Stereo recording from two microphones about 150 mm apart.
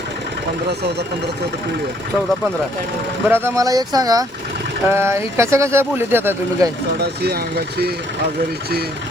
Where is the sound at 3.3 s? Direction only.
15° right (ahead or behind).